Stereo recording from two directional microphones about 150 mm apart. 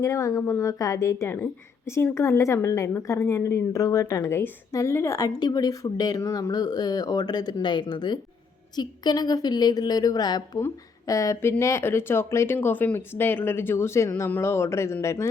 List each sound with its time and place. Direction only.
0.0 s a woman's voice: 20° left (ahead or behind)